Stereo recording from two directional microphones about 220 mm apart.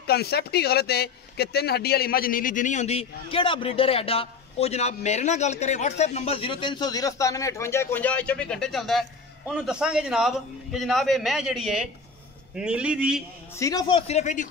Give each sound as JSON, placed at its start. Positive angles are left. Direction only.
{"t": 0.0, "sound": "a man's voice", "side_deg": 45}
{"t": 13.6, "sound": "speech", "side_deg": 15}